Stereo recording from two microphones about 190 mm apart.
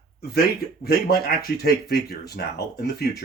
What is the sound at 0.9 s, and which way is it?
Speech, 55° left (ahead or behind).